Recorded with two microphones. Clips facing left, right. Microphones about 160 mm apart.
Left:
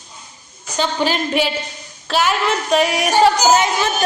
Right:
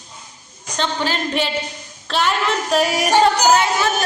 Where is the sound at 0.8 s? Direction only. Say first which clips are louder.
Left 3 dB; 10° left (ahead or behind).